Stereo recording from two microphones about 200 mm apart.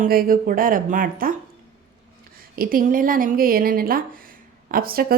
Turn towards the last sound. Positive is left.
turn(degrees=-45)  # may be behind; listen again after turning